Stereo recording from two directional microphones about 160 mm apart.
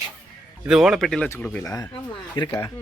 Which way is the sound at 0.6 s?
5° right (ahead or behind).